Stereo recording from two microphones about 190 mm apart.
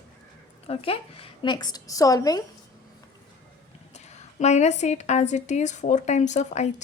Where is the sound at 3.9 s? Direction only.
35° left (ahead or behind).